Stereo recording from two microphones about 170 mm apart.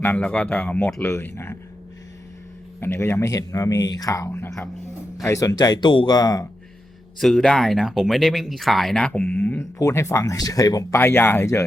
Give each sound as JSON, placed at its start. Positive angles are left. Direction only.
{"t": 0.0, "sound": "speech", "side_deg": 10}
{"t": 2.8, "sound": "speech", "side_deg": 15}
{"t": 7.2, "sound": "speech", "side_deg": 0}